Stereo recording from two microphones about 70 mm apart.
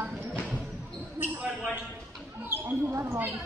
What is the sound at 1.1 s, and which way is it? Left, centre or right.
Basketball bounce, right.